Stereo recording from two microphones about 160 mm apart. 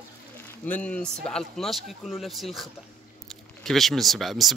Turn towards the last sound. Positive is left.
turn(degrees=0)  # may be behind; listen again after turning